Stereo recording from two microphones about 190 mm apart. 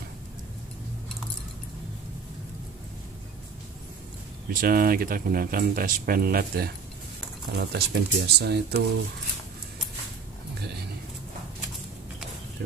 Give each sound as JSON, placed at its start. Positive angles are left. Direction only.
{"t": 4.5, "sound": "speech", "side_deg": -50}